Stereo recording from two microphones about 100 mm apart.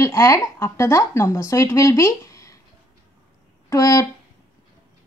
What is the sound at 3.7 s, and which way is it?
Speech, 35° left (ahead or behind).